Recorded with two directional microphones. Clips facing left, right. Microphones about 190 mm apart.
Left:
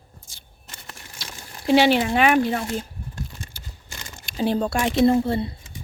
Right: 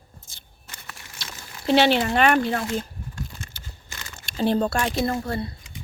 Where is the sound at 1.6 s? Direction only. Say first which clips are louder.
Left 2 dB; 10° left (ahead or behind).